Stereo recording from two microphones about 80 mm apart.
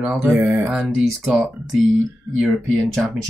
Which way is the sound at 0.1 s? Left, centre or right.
Right.